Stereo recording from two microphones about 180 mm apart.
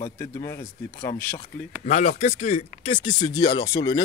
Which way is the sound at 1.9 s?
40° left (ahead or behind).